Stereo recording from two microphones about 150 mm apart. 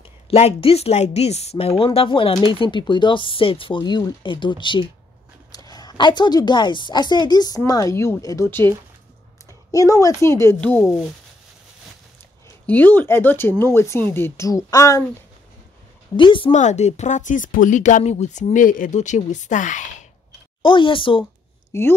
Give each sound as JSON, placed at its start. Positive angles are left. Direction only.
{"t": 0.3, "sound": "a woman's voice", "side_deg": 40}
{"t": 12.6, "sound": "speech", "side_deg": 10}
{"t": 16.2, "sound": "speech", "side_deg": 35}
{"t": 16.5, "sound": "speech", "side_deg": 50}
{"t": 20.6, "sound": "speech", "side_deg": 35}
{"t": 21.7, "sound": "a woman's voice", "side_deg": 20}